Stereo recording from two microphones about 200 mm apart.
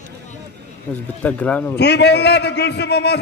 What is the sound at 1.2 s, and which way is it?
Speech, 5° left (ahead or behind).